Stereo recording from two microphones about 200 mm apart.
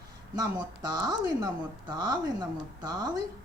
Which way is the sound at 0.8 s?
20° right (ahead or behind).